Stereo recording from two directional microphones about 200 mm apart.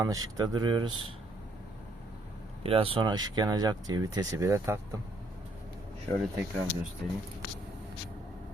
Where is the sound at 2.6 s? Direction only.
30° right (ahead or behind).